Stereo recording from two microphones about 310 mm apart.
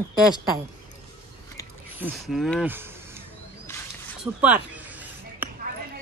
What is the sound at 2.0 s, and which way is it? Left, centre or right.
Speech, centre.